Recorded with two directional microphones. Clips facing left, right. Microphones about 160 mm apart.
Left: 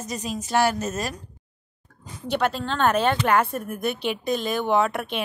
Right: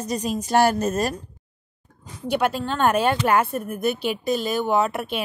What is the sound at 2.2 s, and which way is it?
A woman's voice, 10° right (ahead or behind).